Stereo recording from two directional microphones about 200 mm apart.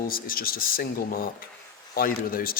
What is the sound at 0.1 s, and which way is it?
Speech, 45° left (ahead or behind).